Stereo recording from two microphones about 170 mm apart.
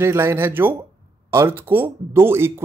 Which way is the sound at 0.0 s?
15° right (ahead or behind).